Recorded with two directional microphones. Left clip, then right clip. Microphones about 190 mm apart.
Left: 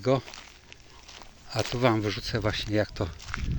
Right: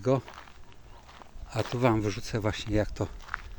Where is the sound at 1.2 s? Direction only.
15° left (ahead or behind).